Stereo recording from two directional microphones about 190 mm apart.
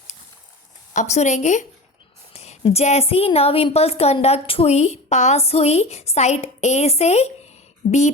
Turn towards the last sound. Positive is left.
turn(degrees=50)  # may be behind; listen again after turning